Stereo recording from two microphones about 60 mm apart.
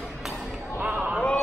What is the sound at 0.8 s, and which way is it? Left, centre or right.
Basketball bounce, right.